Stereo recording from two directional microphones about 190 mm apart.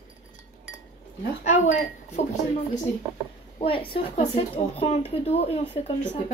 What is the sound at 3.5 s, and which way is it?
A woman's voice, 30° left (ahead or behind).